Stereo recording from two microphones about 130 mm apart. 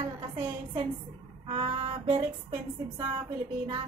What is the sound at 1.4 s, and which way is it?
Female singing, 45° right (ahead or behind).